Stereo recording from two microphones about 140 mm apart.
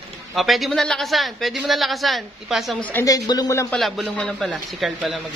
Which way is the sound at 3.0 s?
25° left (ahead or behind).